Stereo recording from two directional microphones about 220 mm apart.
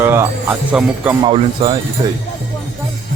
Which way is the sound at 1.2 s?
20° right (ahead or behind).